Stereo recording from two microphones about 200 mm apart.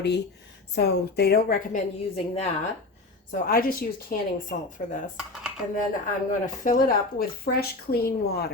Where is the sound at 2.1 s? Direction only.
30° left (ahead or behind).